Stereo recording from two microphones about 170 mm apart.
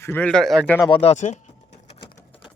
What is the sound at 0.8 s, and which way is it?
Speech, 35° left (ahead or behind).